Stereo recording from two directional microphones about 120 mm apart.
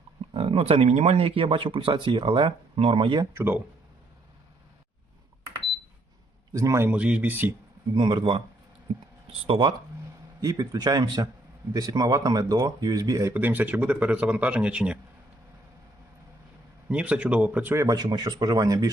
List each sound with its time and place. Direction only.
0.3 s speech: 50° right (ahead or behind)
3.3 s speech: 20° right (ahead or behind)
6.5 s speech: 25° right (ahead or behind)
6.9 s speech: 10° right (ahead or behind)
7.9 s speech: 45° right (ahead or behind)
9.5 s speech: 45° right (ahead or behind)
10.4 s speech: 30° right (ahead or behind)
13.3 s speech: 15° right (ahead or behind)
16.9 s speech: 10° right (ahead or behind)
17.8 s speech: 35° right (ahead or behind)